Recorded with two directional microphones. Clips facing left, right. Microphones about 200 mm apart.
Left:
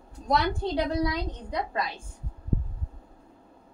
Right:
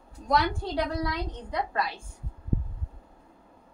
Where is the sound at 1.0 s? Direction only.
20° left (ahead or behind).